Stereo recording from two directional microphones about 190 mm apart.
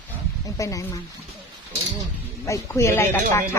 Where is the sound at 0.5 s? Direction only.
15° left (ahead or behind).